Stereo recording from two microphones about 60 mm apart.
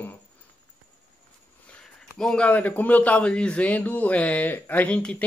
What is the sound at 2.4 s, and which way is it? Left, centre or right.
A man's voice, left.